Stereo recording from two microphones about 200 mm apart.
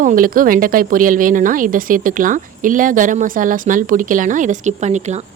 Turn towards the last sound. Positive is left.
turn(degrees=-35)  # may be behind; listen again after turning